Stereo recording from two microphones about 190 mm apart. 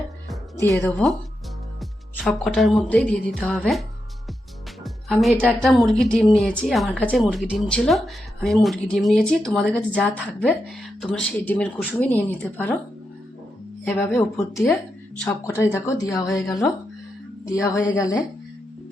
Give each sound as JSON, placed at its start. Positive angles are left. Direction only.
{"t": 0.6, "sound": "speech", "side_deg": 10}
{"t": 1.8, "sound": "music", "side_deg": 0}
{"t": 4.8, "sound": "speech", "side_deg": 0}
{"t": 7.3, "sound": "speech", "side_deg": -5}
{"t": 14.2, "sound": "speech", "side_deg": 10}